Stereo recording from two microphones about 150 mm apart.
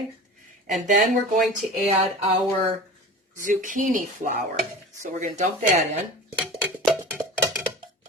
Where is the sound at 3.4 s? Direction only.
60° right (ahead or behind).